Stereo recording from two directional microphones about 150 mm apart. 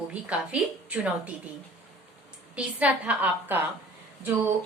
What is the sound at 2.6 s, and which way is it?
A woman's voice, 10° right (ahead or behind).